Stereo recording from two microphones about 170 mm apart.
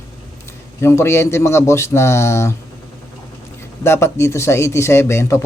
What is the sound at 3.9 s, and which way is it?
A man's voice, 15° left (ahead or behind).